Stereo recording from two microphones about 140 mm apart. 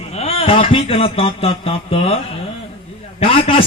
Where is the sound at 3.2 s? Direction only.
40° left (ahead or behind).